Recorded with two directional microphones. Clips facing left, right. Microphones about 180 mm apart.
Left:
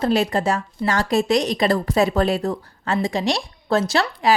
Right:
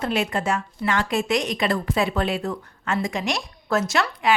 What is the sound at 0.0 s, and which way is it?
Speech, 35° left (ahead or behind).